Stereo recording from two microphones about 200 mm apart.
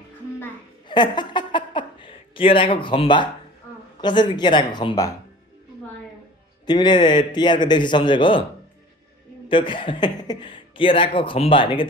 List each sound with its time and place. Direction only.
0.8 s a sound: 20° left (ahead or behind)
4.0 s speech: 20° left (ahead or behind)
6.6 s speech: 20° left (ahead or behind)
9.5 s speech: 25° left (ahead or behind)